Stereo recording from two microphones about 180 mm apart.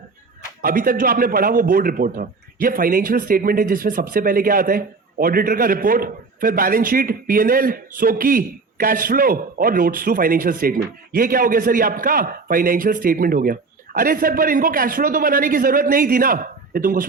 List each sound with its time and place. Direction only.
0.6 s a man's voice: 50° right (ahead or behind)